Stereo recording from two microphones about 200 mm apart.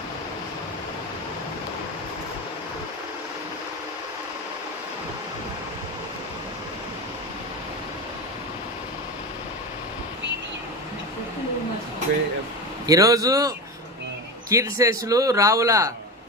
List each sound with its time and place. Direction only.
12.8 s a man's voice: 15° right (ahead or behind)
14.5 s a man's voice: 15° right (ahead or behind)